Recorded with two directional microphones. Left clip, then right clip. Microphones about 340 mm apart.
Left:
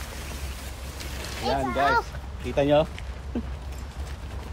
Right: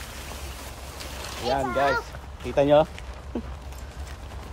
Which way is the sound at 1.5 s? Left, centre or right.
Centre.